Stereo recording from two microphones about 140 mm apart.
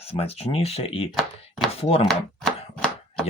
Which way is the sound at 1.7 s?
45° left (ahead or behind).